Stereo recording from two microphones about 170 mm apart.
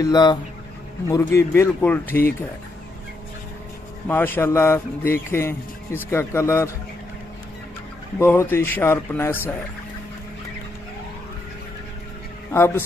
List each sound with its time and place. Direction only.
0.0 s a man's voice: 25° left (ahead or behind)
4.1 s a man's voice: 10° left (ahead or behind)
8.2 s a man's voice: 15° left (ahead or behind)
12.5 s a man's voice: 15° left (ahead or behind)